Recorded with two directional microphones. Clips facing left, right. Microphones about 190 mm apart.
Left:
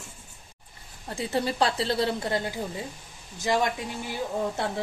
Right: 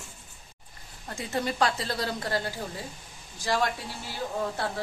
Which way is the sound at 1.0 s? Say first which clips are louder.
Left 3 dB; 30° left (ahead or behind).